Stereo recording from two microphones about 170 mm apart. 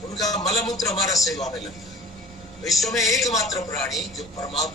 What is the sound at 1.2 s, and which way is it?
A man's voice, centre (ahead or behind).